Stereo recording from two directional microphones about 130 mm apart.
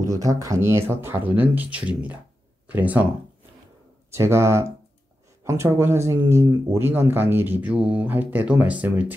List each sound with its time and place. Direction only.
0.0 s speech: 25° right (ahead or behind)
4.1 s speech: 20° right (ahead or behind)